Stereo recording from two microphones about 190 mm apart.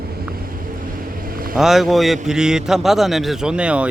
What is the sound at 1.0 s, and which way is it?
Vehicle, 50° right (ahead or behind).